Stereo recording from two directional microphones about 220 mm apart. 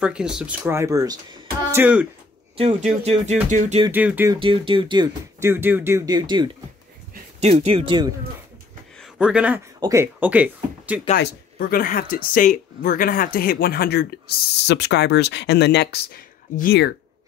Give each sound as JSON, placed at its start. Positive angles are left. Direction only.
{"t": 0.0, "sound": "speech", "side_deg": -5}
{"t": 2.5, "sound": "speech", "side_deg": -25}
{"t": 3.9, "sound": "speech", "side_deg": -10}
{"t": 4.4, "sound": "speech", "side_deg": -20}
{"t": 9.0, "sound": "speech", "side_deg": -5}
{"t": 11.1, "sound": "speech", "side_deg": 40}